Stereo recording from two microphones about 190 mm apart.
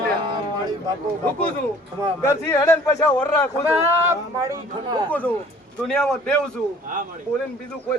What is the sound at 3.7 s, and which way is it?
A man's voice, 10° right (ahead or behind).